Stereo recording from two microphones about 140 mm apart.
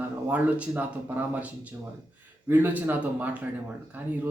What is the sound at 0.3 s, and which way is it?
Speech, 10° right (ahead or behind).